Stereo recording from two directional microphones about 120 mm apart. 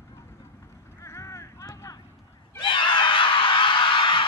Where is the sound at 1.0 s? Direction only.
25° left (ahead or behind).